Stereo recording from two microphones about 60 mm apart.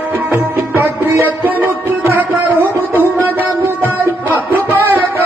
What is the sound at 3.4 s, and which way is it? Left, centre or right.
Music, right.